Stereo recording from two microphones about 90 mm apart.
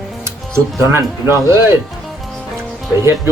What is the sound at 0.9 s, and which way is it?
Speech, 35° right (ahead or behind).